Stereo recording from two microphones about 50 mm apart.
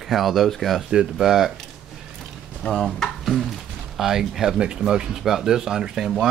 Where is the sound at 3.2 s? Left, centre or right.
Centre.